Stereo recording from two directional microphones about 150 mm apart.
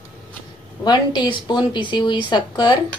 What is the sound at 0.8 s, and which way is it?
A woman's voice, 30° left (ahead or behind).